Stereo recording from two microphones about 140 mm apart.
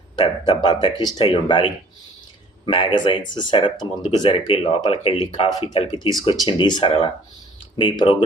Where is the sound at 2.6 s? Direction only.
35° left (ahead or behind).